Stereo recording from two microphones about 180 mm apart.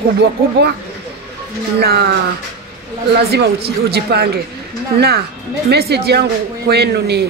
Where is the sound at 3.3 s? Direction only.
60° right (ahead or behind).